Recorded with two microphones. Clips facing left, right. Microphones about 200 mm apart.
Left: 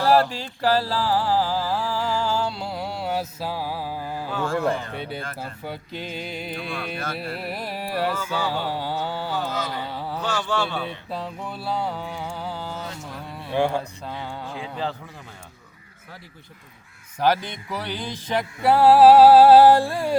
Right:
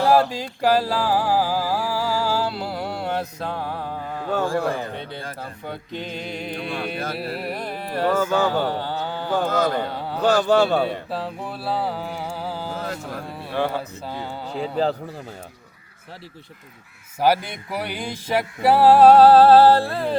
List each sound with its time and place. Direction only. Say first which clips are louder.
0.0 s a sound: right 1 dB; 15° right (ahead or behind); by 4.3 s 5° left (ahead or behind)
5.1 s music: even; 5° left (ahead or behind)
6.6 s speech: right 3 dB; 50° right (ahead or behind)
6.9 s carnatic music: right 3 dB; centre (ahead or behind)
8.0 s speech: right 9 dB; 50° right (ahead or behind)
8.7 s carnatic music: right 1 dB; 10° left (ahead or behind)
9.3 s speech: right 7 dB; 50° right (ahead or behind)
10.2 s speech: right 10 dB; 40° right (ahead or behind)
11.1 s music: right 3 dB; 5° right (ahead or behind)
12.1 s carnatic music: right 2 dB; 5° right (ahead or behind)
13.7 s music: even; 5° right (ahead or behind)
14.4 s speech: right 9 dB; 40° right (ahead or behind)
17.2 s music: right 2 dB; 10° right (ahead or behind); by 20.1 s 15° left (ahead or behind)